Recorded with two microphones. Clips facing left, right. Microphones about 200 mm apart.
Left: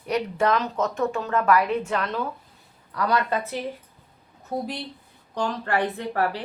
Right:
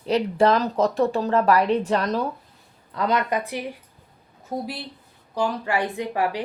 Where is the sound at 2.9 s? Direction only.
20° right (ahead or behind).